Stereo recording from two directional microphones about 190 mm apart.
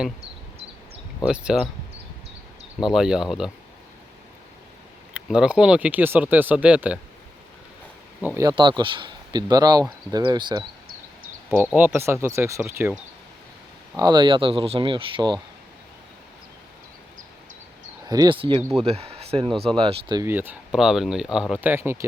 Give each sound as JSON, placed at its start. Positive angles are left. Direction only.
{"t": 1.2, "sound": "speech", "side_deg": -5}
{"t": 2.9, "sound": "speech", "side_deg": -5}
{"t": 5.1, "sound": "speech", "side_deg": -5}
{"t": 8.2, "sound": "speech", "side_deg": -15}
{"t": 11.5, "sound": "speech", "side_deg": -10}
{"t": 13.9, "sound": "speech", "side_deg": -20}
{"t": 18.1, "sound": "speech", "side_deg": -20}
{"t": 20.2, "sound": "speech", "side_deg": -10}